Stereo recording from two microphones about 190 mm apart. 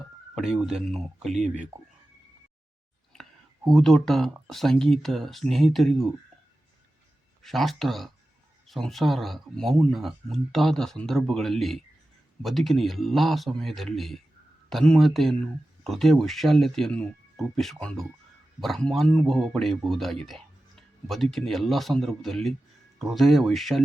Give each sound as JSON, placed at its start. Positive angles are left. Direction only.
{"t": 0.3, "sound": "speech", "side_deg": -5}
{"t": 1.3, "sound": "speech", "side_deg": -40}
{"t": 3.1, "sound": "a sound", "side_deg": 0}
{"t": 4.4, "sound": "speech", "side_deg": 0}
{"t": 7.4, "sound": "speech", "side_deg": 0}